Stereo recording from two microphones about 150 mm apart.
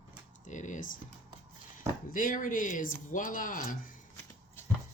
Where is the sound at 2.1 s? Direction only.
65° left (ahead or behind).